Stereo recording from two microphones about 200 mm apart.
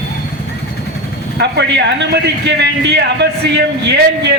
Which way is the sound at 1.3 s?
60° right (ahead or behind).